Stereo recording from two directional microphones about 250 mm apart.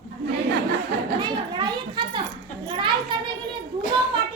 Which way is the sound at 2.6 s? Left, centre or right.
Centre.